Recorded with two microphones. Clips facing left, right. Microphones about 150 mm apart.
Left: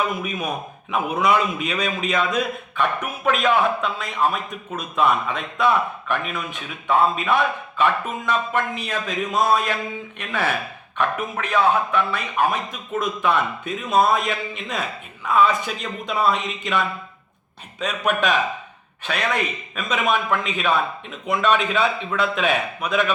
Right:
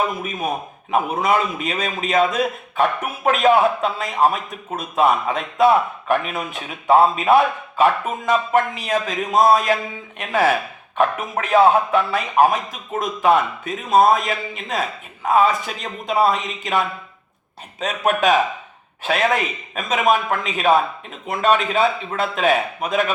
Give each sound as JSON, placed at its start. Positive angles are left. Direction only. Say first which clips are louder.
{"t": 0.2, "sound": "a man's voice", "louder": "right 2 dB", "side_deg": -45}